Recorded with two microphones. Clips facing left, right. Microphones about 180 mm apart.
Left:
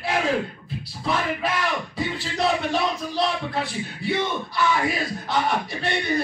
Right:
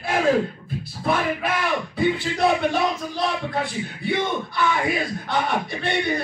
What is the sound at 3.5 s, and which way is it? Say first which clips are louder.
Bellow: right 1 dB; 50° right (ahead or behind).